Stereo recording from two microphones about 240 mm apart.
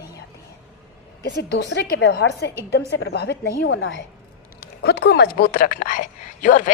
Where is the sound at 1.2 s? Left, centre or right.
Left.